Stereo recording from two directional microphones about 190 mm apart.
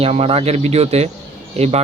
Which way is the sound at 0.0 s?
30° right (ahead or behind).